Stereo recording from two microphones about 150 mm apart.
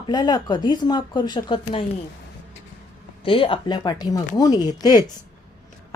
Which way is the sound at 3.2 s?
35° left (ahead or behind).